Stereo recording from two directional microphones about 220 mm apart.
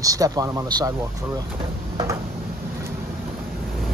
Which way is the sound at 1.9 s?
15° right (ahead or behind).